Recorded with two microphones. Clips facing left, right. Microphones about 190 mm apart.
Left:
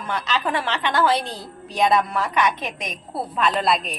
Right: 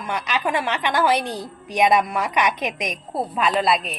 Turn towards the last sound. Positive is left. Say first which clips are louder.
# right 1 dB
turn(degrees=-5)  # may be behind; listen again after turning